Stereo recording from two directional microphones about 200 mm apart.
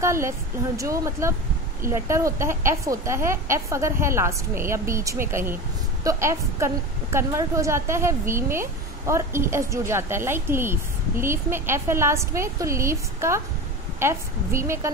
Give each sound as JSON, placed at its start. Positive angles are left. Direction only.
{"t": 0.0, "sound": "a woman's voice", "side_deg": -15}